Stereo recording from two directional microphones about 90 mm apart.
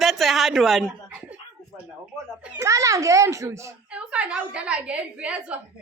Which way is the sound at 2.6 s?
35° right (ahead or behind).